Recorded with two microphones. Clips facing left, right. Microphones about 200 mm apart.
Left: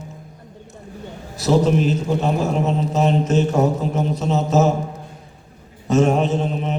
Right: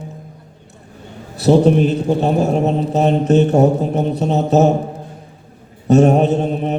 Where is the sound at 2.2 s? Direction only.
35° right (ahead or behind).